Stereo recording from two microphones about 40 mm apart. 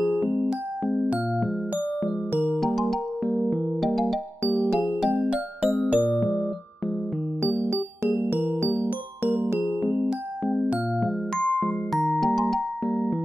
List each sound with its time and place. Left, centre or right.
0.9 s music: right
2.6 s music: centre
4.7 s music: centre
5.3 s music: right
7.6 s music: right
10.5 s music: right
11.3 s music: left
11.6 s music: centre